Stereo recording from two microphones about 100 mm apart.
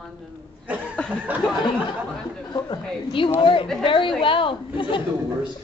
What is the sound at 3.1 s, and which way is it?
A woman's voice, 60° left (ahead or behind).